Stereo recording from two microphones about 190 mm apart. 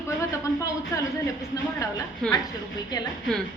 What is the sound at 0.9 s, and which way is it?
Speech, 15° left (ahead or behind).